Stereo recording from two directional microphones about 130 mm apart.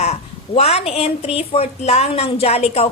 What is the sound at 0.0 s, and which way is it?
A woman's voice, 55° left (ahead or behind).